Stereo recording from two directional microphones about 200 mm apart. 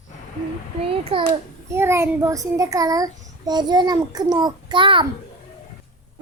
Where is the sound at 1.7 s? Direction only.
15° right (ahead or behind).